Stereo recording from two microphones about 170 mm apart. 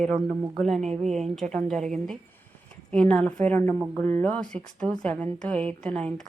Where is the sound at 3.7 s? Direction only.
10° right (ahead or behind).